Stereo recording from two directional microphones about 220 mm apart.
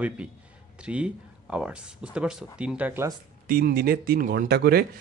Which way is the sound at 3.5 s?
40° right (ahead or behind).